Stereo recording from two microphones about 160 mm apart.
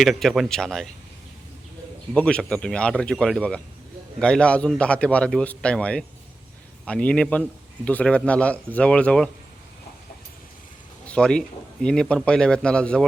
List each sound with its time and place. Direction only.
0.0 s a man's voice: centre (ahead or behind)
2.1 s a man's voice: 5° left (ahead or behind)
11.0 s a man's voice: 5° left (ahead or behind)